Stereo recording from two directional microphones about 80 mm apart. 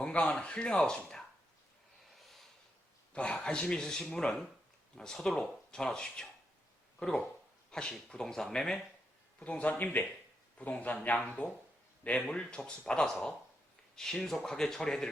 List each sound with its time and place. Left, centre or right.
0.0 s speech: centre
2.1 s snort: centre
3.1 s speech: centre
7.7 s speech: centre
9.4 s a man's voice: centre